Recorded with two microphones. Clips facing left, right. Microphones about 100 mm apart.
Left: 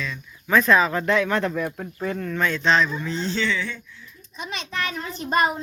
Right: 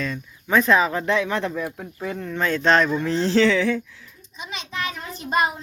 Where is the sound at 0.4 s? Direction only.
25° right (ahead or behind).